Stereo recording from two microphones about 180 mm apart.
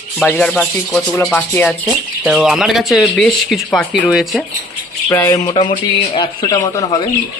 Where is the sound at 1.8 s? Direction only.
Centre (ahead or behind).